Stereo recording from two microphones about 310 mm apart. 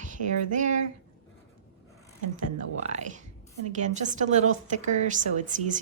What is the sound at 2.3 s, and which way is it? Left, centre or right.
Speech, right.